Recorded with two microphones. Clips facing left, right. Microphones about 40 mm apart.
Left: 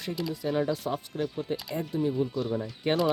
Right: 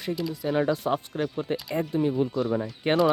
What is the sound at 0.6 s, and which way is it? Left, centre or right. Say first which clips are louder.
Speech: right 4 dB; right.